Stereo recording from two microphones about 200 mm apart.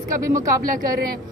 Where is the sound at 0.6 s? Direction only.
45° right (ahead or behind).